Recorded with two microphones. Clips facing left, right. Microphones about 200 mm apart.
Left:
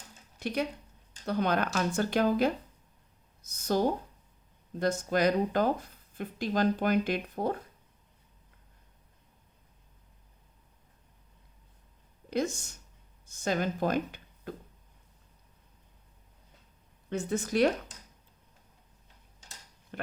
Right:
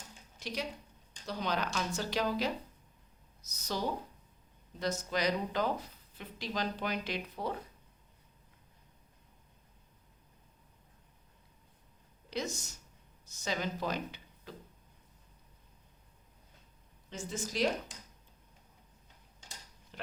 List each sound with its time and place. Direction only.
0.3 s speech: 55° left (ahead or behind)
13.3 s speech: 50° left (ahead or behind)
17.1 s speech: 60° left (ahead or behind)
19.9 s speech: 55° left (ahead or behind)